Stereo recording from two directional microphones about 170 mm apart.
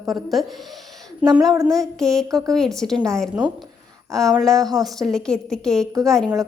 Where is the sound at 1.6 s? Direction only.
Centre (ahead or behind).